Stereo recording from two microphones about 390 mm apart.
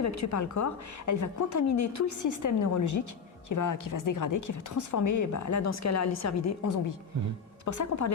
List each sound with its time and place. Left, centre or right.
0.0 s a woman's voice: left